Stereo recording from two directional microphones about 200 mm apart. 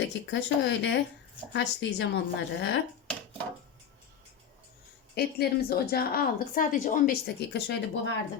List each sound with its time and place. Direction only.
0.0 s a woman's voice: 60° left (ahead or behind)
5.1 s a woman's voice: 50° left (ahead or behind)